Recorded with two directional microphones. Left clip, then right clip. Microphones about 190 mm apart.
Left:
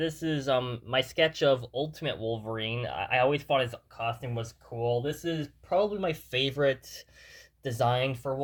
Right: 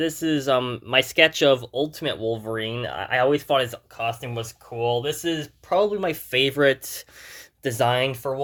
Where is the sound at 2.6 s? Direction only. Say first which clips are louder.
Right 5 dB; 15° right (ahead or behind).